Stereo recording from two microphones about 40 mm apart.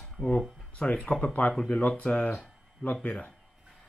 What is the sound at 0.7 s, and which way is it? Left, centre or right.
Speech, left.